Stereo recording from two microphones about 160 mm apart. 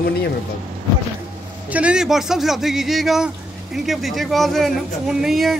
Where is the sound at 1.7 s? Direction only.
10° right (ahead or behind).